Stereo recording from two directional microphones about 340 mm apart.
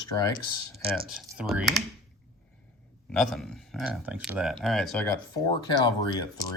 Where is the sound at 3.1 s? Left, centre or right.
Centre.